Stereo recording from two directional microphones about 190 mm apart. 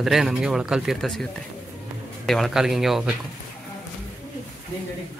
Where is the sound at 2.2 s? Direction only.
Centre (ahead or behind).